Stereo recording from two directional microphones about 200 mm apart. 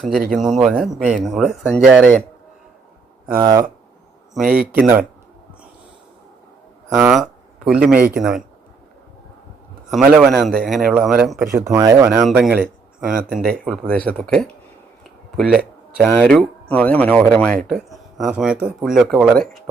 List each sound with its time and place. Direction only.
0.3 s speech: centre (ahead or behind)
3.3 s speech: 15° right (ahead or behind)
4.4 s speech: 5° right (ahead or behind)
6.9 s speech: 10° right (ahead or behind)
9.9 s speech: 5° right (ahead or behind)
11.5 s speech: 15° right (ahead or behind)
12.4 s speech: centre (ahead or behind)